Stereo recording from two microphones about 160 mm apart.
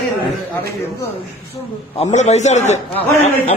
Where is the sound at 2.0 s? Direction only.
45° left (ahead or behind).